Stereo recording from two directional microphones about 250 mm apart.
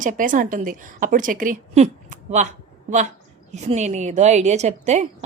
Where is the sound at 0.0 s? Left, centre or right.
Right.